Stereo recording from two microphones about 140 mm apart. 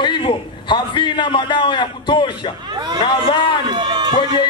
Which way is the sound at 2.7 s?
30° right (ahead or behind).